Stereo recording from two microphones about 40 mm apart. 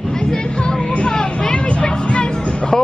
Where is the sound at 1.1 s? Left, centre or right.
Left.